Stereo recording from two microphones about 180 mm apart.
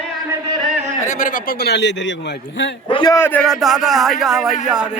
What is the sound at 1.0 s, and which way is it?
A man's voice, 45° left (ahead or behind).